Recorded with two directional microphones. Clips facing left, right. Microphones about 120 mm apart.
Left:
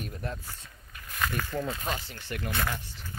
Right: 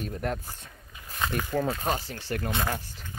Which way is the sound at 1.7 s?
40° right (ahead or behind).